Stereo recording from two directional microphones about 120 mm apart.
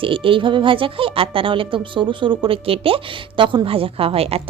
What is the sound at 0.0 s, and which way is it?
Speech, 45° right (ahead or behind).